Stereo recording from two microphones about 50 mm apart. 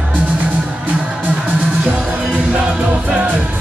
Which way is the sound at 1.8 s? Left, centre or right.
Right.